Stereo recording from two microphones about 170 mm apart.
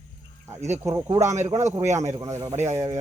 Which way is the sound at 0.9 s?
20° right (ahead or behind).